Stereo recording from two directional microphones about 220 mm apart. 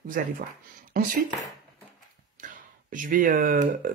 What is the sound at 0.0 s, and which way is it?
Speech, 40° right (ahead or behind).